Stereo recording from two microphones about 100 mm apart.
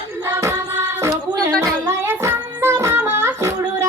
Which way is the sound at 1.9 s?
25° right (ahead or behind).